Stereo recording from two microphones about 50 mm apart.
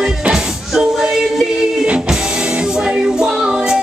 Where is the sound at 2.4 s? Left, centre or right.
Right.